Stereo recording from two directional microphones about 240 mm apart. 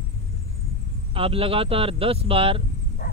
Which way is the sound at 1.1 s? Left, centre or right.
Right.